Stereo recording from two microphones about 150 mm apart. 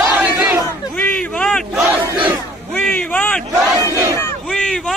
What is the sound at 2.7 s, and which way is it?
Battle cry, 10° left (ahead or behind).